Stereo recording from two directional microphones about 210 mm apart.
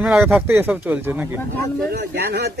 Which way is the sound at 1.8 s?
50° right (ahead or behind).